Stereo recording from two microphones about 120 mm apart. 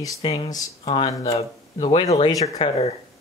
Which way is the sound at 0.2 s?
50° left (ahead or behind).